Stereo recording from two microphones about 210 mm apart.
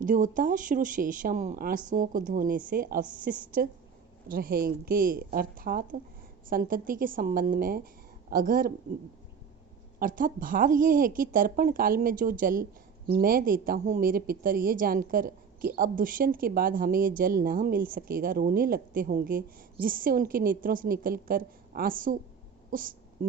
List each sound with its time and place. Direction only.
0.0 s speech: 40° right (ahead or behind)
10.0 s speech: 40° right (ahead or behind)